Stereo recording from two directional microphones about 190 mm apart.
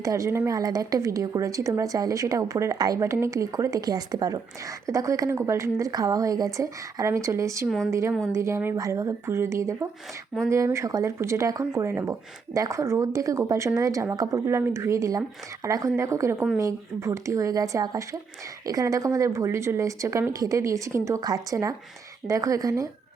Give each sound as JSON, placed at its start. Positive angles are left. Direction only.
{"t": 0.0, "sound": "a woman's voice", "side_deg": -15}